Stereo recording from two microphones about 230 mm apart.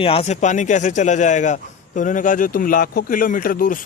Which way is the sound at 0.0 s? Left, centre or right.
Left.